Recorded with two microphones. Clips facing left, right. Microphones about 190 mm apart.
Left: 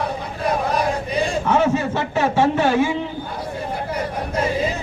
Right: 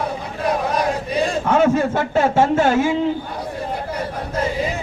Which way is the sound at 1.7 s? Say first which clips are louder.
Right 3 dB; 50° right (ahead or behind).